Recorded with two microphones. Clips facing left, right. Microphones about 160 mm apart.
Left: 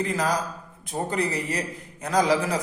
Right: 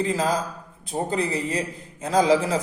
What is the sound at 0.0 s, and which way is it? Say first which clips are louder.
Speech: right 2 dB; 25° right (ahead or behind).